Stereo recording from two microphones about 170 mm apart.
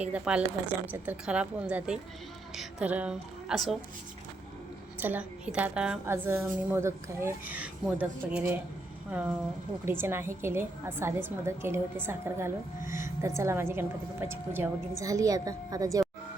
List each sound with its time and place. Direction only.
0.0 s a woman's voice: 5° right (ahead or behind)
4.9 s a woman's voice: 10° right (ahead or behind)